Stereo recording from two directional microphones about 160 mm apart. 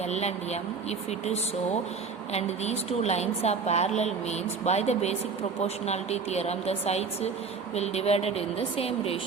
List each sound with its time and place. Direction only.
0.1 s a woman's voice: 40° left (ahead or behind)